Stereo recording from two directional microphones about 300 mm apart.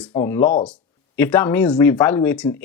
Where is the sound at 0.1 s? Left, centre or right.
Centre.